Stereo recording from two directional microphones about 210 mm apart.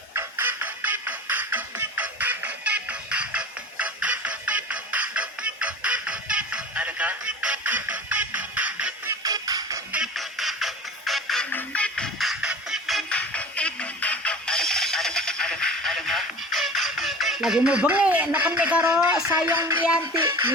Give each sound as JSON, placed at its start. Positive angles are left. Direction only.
{"t": 0.1, "sound": "music", "side_deg": -10}
{"t": 9.2, "sound": "music", "side_deg": -15}
{"t": 9.9, "sound": "music", "side_deg": 0}
{"t": 18.9, "sound": "speech", "side_deg": -5}
{"t": 19.2, "sound": "music", "side_deg": -10}